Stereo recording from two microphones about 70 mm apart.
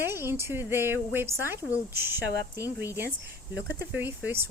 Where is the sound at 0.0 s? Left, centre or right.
Right.